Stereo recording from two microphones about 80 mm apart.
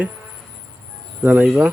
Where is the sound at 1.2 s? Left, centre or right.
Centre.